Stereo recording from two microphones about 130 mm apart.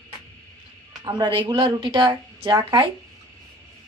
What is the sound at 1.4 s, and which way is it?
Speech, 35° right (ahead or behind).